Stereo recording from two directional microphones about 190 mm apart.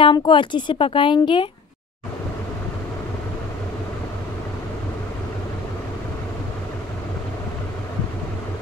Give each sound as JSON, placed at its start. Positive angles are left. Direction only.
{"t": 0.0, "sound": "speech", "side_deg": 25}